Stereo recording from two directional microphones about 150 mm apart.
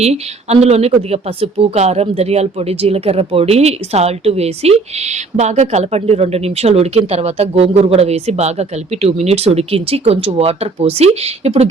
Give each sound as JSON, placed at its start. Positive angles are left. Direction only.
{"t": 0.0, "sound": "a woman's voice", "side_deg": -45}